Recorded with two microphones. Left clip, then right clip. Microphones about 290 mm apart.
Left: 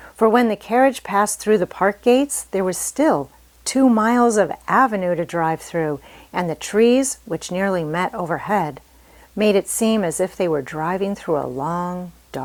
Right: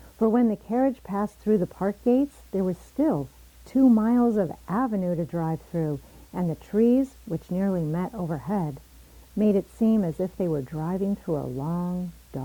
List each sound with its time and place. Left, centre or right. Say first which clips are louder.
0.2 s speech: left 8 dB; centre